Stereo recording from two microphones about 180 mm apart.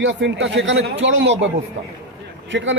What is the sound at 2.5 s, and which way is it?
Speech, 90° right.